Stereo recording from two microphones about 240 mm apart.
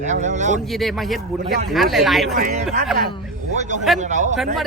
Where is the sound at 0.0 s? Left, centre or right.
Right.